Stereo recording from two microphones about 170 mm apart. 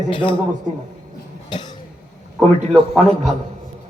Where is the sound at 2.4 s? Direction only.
Centre (ahead or behind).